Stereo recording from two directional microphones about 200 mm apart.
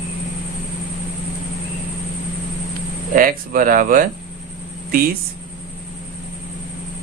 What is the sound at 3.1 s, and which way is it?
Speech, 45° right (ahead or behind).